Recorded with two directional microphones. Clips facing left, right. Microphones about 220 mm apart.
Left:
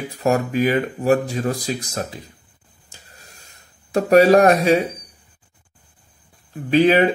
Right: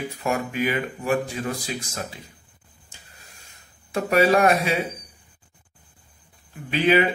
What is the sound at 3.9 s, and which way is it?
Speech, 40° left (ahead or behind).